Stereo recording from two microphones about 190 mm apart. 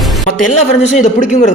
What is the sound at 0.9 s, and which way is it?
Speech, 40° left (ahead or behind).